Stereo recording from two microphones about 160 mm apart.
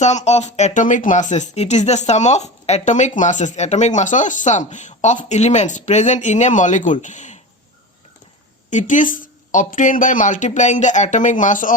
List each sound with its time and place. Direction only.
0.0 s speech: 45° left (ahead or behind)
8.7 s speech: 55° left (ahead or behind)